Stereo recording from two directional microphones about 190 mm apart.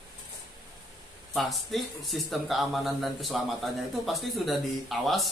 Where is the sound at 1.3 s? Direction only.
Centre (ahead or behind).